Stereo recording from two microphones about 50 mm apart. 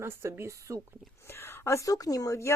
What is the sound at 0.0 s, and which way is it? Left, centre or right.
Speech, right.